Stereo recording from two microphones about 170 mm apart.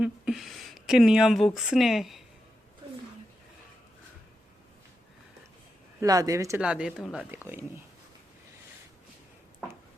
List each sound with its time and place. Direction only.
0.0 s speech: 5° right (ahead or behind)
6.0 s speech: 20° right (ahead or behind)
6.6 s speech: 5° right (ahead or behind)